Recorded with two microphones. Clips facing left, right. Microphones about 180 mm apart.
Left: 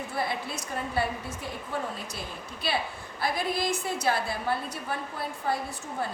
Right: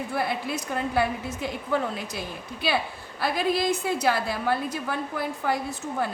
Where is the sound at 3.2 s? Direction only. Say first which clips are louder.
Right 4 dB; 70° right (ahead or behind).